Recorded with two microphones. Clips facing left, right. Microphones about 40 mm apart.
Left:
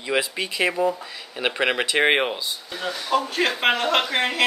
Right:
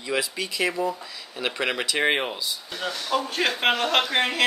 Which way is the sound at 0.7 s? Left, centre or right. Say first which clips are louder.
Left 4 dB; centre.